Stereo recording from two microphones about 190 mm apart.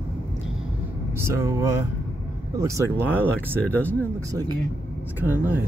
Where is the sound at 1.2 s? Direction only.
15° right (ahead or behind).